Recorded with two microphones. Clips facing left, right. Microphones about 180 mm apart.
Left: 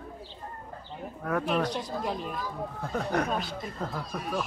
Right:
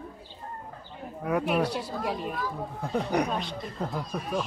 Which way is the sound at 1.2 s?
10° right (ahead or behind).